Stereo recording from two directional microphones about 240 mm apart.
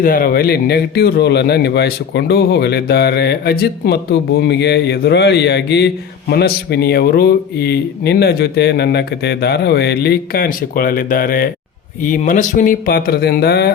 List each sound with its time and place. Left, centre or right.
0.0 s speech: left